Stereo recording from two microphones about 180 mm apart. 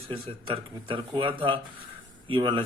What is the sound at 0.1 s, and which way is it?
Speech, 30° right (ahead or behind).